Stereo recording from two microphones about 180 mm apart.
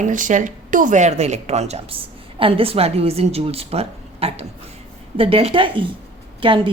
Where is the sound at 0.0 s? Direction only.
45° right (ahead or behind).